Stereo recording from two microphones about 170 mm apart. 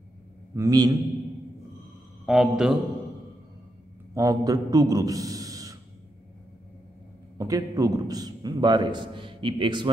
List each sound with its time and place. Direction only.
0.6 s a man's voice: 20° right (ahead or behind)
2.2 s speech: centre (ahead or behind)
4.1 s a man's voice: 20° right (ahead or behind)
7.3 s a man's voice: 20° right (ahead or behind)